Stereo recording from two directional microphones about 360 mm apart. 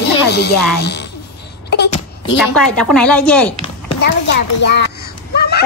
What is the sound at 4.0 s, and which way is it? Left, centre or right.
Speech, left.